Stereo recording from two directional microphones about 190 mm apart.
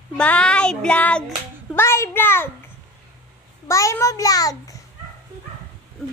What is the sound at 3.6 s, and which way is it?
A child's voice, 15° left (ahead or behind).